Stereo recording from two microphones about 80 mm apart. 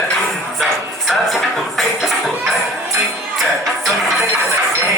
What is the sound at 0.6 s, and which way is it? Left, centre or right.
Music, centre.